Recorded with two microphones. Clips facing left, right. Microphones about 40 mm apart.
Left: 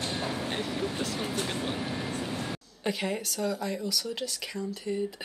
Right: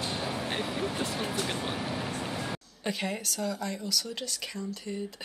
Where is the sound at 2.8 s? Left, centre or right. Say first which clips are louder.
Left 2 dB; centre.